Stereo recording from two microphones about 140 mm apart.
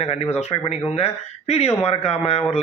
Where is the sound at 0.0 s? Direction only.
50° left (ahead or behind).